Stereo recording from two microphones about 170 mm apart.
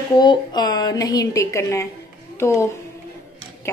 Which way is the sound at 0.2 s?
25° left (ahead or behind).